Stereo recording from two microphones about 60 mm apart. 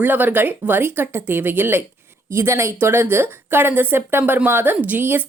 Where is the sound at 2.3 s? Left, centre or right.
Right.